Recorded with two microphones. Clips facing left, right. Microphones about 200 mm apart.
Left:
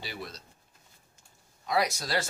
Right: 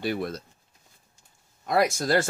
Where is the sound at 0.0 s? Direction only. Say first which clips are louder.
Right 12 dB; 55° right (ahead or behind).